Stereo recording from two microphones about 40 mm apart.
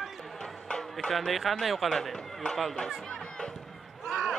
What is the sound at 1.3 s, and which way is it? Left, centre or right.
Speech, centre.